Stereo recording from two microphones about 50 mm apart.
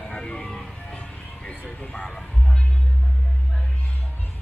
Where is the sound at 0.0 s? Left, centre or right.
Centre.